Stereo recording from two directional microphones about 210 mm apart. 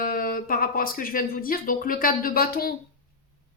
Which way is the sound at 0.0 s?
45° left (ahead or behind).